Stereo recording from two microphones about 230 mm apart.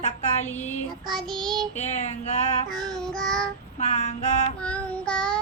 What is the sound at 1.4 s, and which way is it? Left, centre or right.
Child singing, centre.